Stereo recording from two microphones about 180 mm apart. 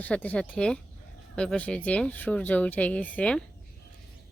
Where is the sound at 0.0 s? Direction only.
10° left (ahead or behind).